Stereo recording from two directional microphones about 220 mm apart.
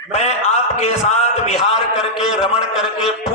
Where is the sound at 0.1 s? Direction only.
30° left (ahead or behind).